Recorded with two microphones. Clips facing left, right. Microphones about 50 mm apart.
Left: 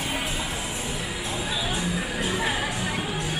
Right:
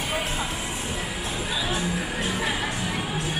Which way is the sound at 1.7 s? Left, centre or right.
Right.